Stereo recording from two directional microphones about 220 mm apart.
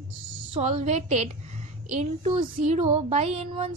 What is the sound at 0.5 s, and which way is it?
A woman's voice, 30° right (ahead or behind).